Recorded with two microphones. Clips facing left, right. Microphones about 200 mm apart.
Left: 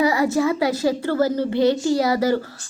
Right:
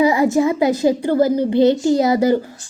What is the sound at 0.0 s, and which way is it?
A child's voice, 20° right (ahead or behind).